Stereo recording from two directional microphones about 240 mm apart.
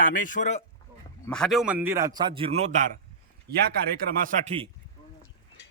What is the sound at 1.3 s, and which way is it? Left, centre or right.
A man's voice, centre.